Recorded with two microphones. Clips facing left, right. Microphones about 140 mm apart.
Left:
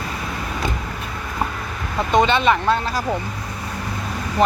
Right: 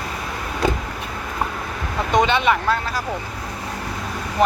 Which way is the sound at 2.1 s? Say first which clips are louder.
Left 1 dB; 15° right (ahead or behind).